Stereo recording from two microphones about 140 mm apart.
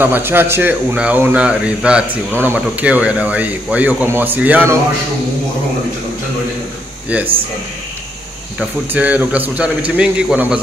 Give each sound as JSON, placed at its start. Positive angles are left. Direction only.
{"t": 0.0, "sound": "speech", "side_deg": -15}
{"t": 7.1, "sound": "speech", "side_deg": -10}
{"t": 8.5, "sound": "speech", "side_deg": -10}